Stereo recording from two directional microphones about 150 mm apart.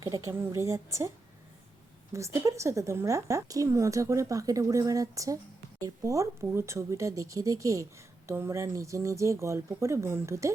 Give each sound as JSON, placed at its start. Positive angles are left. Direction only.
{"t": 0.0, "sound": "a woman's voice", "side_deg": -20}
{"t": 2.1, "sound": "a woman's voice", "side_deg": -20}